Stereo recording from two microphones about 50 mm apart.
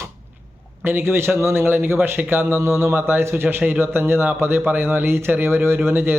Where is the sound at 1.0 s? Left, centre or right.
Right.